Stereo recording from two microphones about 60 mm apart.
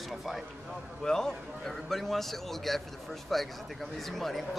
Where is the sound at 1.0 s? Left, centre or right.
Centre.